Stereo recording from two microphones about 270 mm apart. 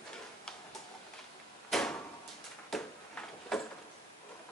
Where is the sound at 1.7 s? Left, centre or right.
Centre.